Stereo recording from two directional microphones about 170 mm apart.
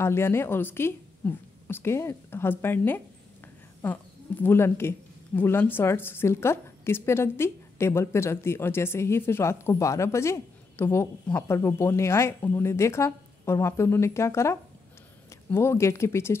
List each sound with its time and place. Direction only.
0.0 s speech: 15° left (ahead or behind)